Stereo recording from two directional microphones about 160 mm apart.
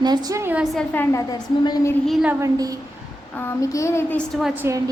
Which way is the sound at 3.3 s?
15° left (ahead or behind).